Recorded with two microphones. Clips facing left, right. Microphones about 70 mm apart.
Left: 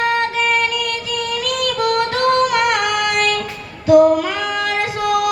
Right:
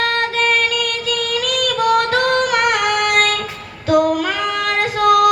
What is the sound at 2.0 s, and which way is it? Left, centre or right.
Female singing, right.